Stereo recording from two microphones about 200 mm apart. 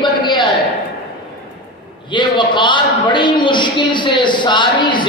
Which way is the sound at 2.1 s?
25° left (ahead or behind).